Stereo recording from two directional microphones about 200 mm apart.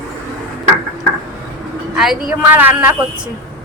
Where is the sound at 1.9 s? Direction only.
Centre (ahead or behind).